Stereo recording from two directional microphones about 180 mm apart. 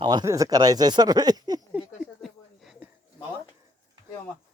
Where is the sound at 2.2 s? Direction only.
Centre (ahead or behind).